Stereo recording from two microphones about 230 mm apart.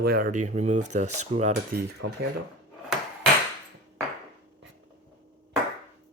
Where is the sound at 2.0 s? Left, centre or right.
Right.